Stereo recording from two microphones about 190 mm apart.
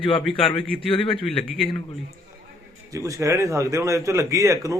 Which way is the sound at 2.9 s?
15° right (ahead or behind).